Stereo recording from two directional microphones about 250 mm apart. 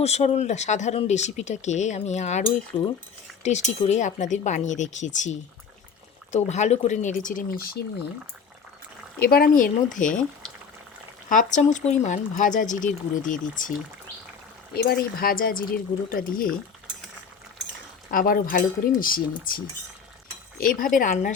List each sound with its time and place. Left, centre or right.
0.0 s speech: left
9.2 s speech: left
11.3 s speech: left
14.8 s speech: left
18.1 s speech: left